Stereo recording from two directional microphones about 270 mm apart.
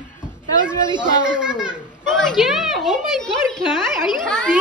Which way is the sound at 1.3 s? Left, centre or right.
Centre.